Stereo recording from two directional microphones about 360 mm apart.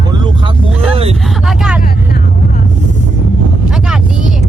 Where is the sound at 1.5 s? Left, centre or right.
Centre.